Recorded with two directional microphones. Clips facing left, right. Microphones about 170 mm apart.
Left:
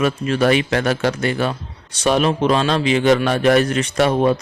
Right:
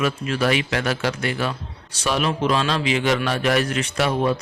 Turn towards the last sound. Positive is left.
turn(degrees=40)  # may be behind; listen again after turning